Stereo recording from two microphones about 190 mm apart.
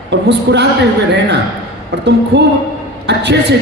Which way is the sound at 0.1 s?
65° right (ahead or behind).